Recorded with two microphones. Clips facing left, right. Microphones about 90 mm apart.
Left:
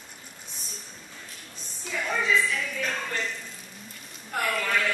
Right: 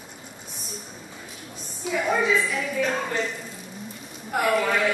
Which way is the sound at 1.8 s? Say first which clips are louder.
Right 5 dB; 10° right (ahead or behind).